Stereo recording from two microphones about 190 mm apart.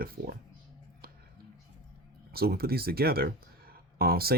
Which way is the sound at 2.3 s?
55° right (ahead or behind).